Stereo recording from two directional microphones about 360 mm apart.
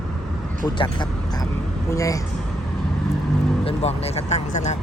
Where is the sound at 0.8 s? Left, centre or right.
Centre.